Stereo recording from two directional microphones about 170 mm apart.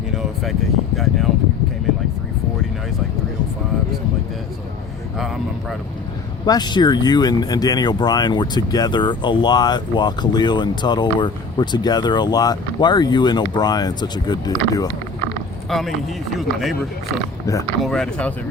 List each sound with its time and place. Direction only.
0.9 s speech: centre (ahead or behind)
6.4 s speech: 25° left (ahead or behind)
15.7 s speech: centre (ahead or behind)
17.4 s speech: 20° left (ahead or behind)
17.8 s speech: 5° left (ahead or behind)